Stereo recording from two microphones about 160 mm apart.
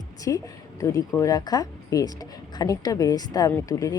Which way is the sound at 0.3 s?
20° left (ahead or behind).